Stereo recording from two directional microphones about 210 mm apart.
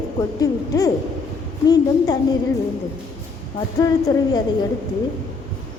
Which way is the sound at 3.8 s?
15° left (ahead or behind).